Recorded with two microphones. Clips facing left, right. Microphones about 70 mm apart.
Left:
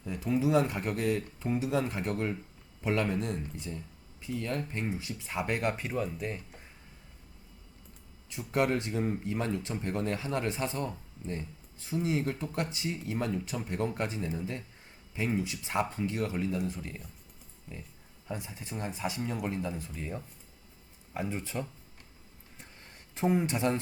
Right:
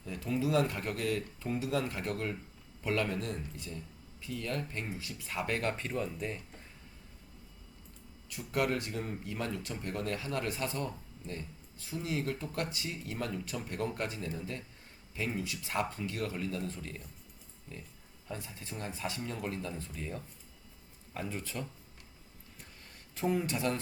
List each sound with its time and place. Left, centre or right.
0.0 s speech: centre
8.3 s speech: left
18.3 s speech: centre
23.1 s speech: left